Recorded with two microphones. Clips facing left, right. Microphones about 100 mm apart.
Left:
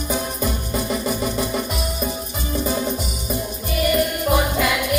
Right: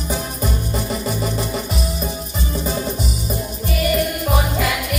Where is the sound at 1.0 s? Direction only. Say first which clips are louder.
Even; 45° left (ahead or behind).